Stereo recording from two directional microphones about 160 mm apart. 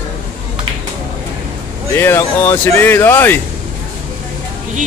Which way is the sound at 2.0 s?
15° left (ahead or behind).